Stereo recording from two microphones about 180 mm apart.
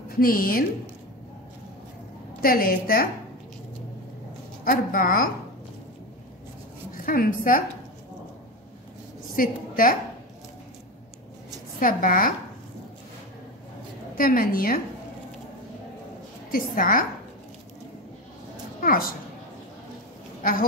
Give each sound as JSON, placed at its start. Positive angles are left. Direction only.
{"t": 0.1, "sound": "a woman's voice", "side_deg": 55}
{"t": 2.4, "sound": "a woman's voice", "side_deg": 55}
{"t": 4.6, "sound": "a woman's voice", "side_deg": 50}
{"t": 7.0, "sound": "a woman's voice", "side_deg": 50}
{"t": 9.3, "sound": "a woman's voice", "side_deg": 50}
{"t": 11.8, "sound": "a woman's voice", "side_deg": 50}
{"t": 14.1, "sound": "a woman's voice", "side_deg": 50}
{"t": 16.5, "sound": "a woman's voice", "side_deg": 50}
{"t": 18.8, "sound": "a woman's voice", "side_deg": 50}